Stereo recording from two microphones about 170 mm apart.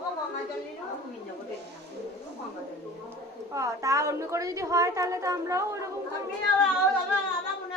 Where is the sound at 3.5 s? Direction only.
20° right (ahead or behind).